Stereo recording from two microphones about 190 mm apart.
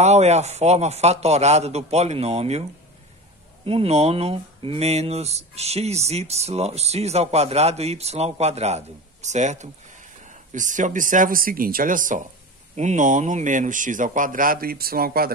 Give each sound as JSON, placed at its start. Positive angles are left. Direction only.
{"t": 0.0, "sound": "speech", "side_deg": -35}
{"t": 3.6, "sound": "speech", "side_deg": -30}